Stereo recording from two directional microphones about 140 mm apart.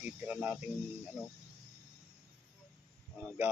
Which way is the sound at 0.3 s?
10° right (ahead or behind).